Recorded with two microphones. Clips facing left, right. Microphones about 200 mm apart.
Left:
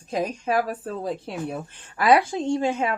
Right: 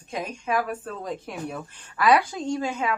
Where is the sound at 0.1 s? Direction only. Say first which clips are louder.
Left 4 dB; 35° left (ahead or behind).